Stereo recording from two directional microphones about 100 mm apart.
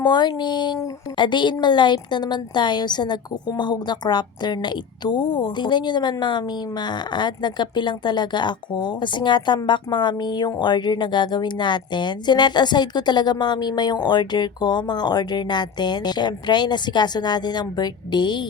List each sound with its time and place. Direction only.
0.0 s speech: 45° left (ahead or behind)